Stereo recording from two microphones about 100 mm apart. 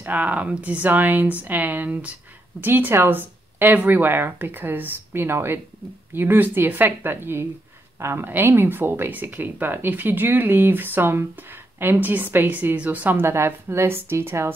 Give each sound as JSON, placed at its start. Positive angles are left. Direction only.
{"t": 0.0, "sound": "speech", "side_deg": -15}